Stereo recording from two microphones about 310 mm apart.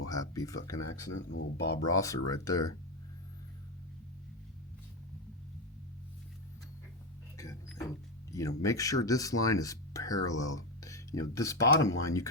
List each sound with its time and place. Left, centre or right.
0.1 s speech: centre
1.1 s speech: left
1.9 s speech: centre
7.3 s speech: centre